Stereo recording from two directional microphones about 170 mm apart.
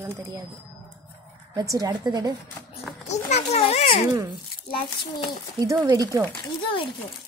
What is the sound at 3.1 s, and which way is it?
Speech, 40° left (ahead or behind).